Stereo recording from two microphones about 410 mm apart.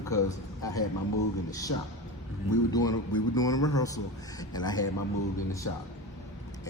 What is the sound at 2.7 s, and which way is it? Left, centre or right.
A man's voice, centre.